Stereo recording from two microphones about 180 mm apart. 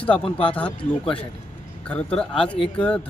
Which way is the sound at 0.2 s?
30° left (ahead or behind).